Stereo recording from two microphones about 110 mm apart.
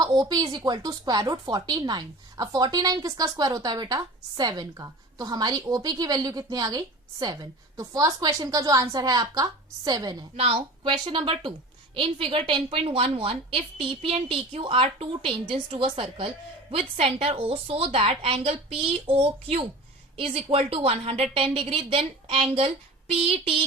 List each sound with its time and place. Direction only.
0.0 s a woman's voice: 40° right (ahead or behind)
10.3 s a woman's voice: 60° right (ahead or behind)
16.7 s a woman's voice: 65° right (ahead or behind)